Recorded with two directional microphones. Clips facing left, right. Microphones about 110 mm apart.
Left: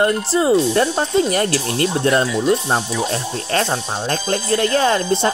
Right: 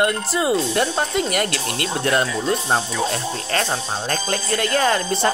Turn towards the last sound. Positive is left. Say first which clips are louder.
# left 3 dB
turn(degrees=25)  # may be behind; listen again after turning